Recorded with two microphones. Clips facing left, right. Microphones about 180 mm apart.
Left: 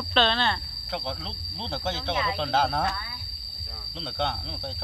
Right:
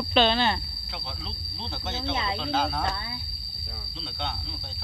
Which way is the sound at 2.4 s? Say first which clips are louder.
Left 4 dB; 70° left (ahead or behind).